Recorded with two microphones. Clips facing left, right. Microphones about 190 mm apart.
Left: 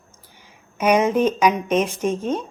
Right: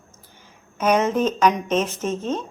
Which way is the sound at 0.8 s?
10° left (ahead or behind).